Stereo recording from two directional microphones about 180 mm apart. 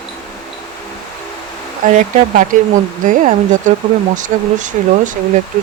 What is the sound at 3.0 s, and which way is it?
Speech, 45° right (ahead or behind).